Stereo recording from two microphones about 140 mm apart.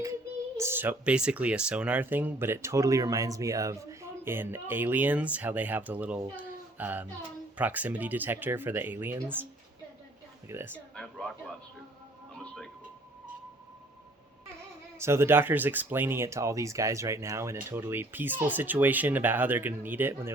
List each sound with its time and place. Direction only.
0.0 s a child's voice: 20° right (ahead or behind)
10.5 s a child's voice: 15° right (ahead or behind)
10.9 s a sound: 5° left (ahead or behind)
12.3 s music: 5° left (ahead or behind)
14.9 s a child's voice: 20° right (ahead or behind)